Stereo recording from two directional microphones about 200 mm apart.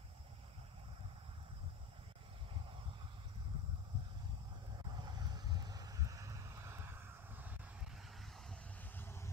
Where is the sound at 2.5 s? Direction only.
25° right (ahead or behind).